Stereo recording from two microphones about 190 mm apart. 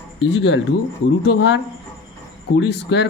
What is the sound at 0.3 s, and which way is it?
Speech, 70° left (ahead or behind).